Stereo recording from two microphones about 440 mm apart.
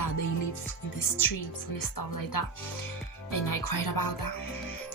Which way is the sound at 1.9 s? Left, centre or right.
Left.